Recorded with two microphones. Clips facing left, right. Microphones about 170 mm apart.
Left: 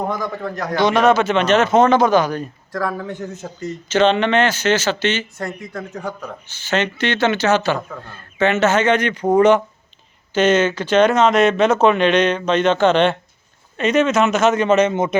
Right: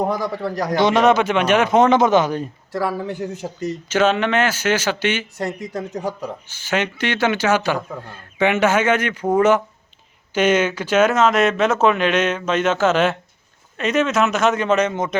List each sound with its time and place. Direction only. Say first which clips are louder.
0.1 s a man's voice: right 2 dB; 35° right (ahead or behind)
0.8 s a man's voice: left 1 dB; 25° right (ahead or behind)
3.8 s speech: left 3 dB; 10° right (ahead or behind)